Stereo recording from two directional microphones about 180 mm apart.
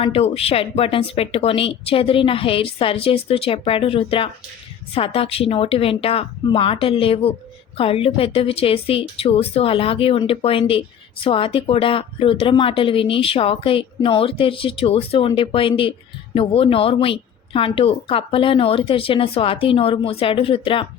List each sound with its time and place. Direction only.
0.0 s a woman's voice: 35° left (ahead or behind)